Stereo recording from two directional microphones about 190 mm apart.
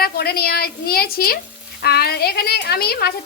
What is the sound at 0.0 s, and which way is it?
A woman's voice, 55° left (ahead or behind).